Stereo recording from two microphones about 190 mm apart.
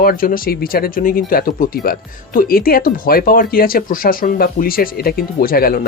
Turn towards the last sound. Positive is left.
turn(degrees=50)  # may be behind; listen again after turning